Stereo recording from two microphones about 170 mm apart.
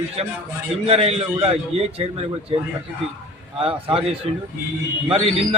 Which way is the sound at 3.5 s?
35° right (ahead or behind).